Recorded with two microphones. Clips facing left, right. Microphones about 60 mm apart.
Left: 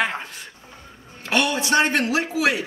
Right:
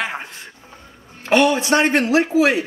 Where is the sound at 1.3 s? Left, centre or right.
Right.